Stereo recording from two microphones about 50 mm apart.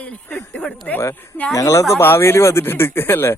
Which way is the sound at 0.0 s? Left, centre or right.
Left.